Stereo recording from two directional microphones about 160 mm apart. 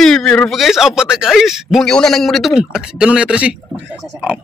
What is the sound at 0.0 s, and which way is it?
A man's voice, 5° left (ahead or behind).